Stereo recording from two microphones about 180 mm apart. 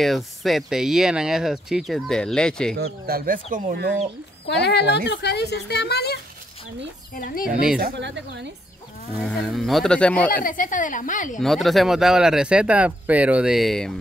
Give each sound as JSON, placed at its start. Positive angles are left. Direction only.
{"t": 0.0, "sound": "speech", "side_deg": 0}
{"t": 2.7, "sound": "speech", "side_deg": -55}
{"t": 4.5, "sound": "speech", "side_deg": 70}
{"t": 7.2, "sound": "a woman's voice", "side_deg": 55}
{"t": 7.8, "sound": "speech", "side_deg": -75}
{"t": 9.2, "sound": "speech", "side_deg": 0}
{"t": 10.4, "sound": "a woman's voice", "side_deg": 50}
{"t": 11.3, "sound": "speech", "side_deg": 0}